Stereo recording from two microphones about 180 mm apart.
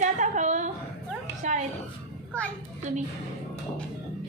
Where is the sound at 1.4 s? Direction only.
45° right (ahead or behind).